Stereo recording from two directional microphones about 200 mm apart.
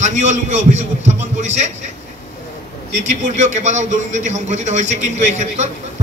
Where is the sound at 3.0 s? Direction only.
35° right (ahead or behind).